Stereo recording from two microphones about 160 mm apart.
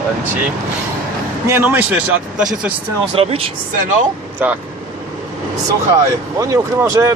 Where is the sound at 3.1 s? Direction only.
35° right (ahead or behind).